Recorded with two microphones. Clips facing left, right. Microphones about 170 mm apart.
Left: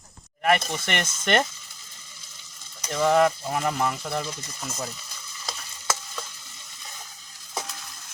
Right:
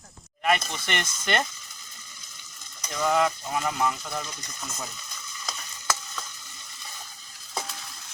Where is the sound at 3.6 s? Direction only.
40° left (ahead or behind).